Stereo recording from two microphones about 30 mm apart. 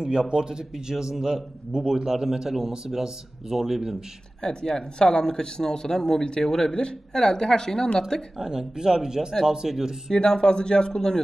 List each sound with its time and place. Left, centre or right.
0.0 s a man's voice: right; by 3.9 s centre
4.4 s speech: left
6.4 s speech: centre
6.7 s speech: left
8.4 s a man's voice: right
10.1 s speech: left